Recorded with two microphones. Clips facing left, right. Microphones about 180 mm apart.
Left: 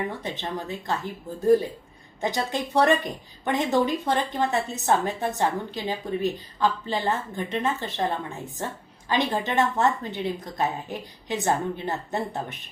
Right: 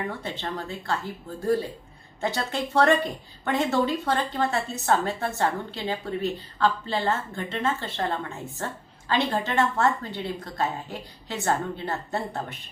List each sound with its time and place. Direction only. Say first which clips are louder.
0.2 s a woman's voice: left 1 dB; 20° left (ahead or behind)